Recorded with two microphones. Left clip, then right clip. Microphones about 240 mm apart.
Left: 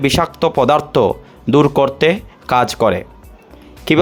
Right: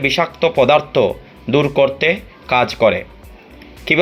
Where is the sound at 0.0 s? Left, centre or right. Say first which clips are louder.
Even; left.